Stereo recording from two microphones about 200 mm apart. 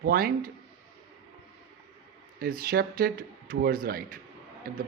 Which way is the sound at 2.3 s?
50° right (ahead or behind).